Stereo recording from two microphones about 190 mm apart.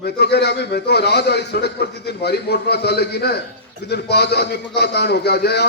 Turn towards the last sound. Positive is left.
turn(degrees=60)  # may be behind; listen again after turning